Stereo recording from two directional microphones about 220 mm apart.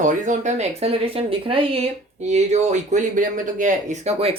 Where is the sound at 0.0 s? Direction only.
35° right (ahead or behind).